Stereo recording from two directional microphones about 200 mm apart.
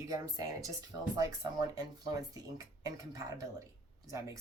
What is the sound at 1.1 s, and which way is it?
Speech, 20° right (ahead or behind).